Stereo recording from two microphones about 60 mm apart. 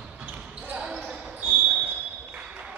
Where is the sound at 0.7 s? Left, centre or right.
Centre.